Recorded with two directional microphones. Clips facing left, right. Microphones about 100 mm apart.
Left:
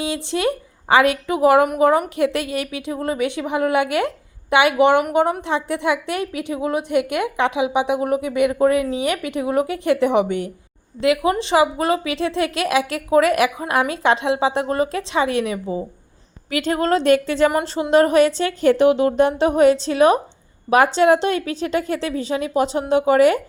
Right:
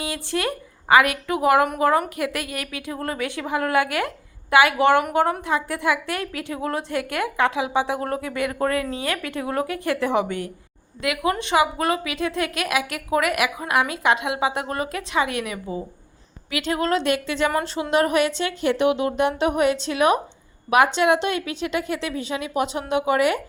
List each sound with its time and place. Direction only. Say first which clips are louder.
0.0 s a woman's voice: left 5 dB; 20° left (ahead or behind)
16.5 s a woman's voice: left 4 dB; 40° left (ahead or behind)